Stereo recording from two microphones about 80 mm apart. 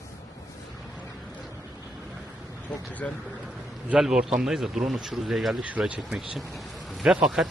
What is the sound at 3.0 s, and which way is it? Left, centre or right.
Speech, centre.